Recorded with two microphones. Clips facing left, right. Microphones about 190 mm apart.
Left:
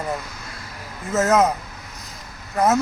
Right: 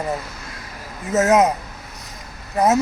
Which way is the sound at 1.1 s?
20° right (ahead or behind).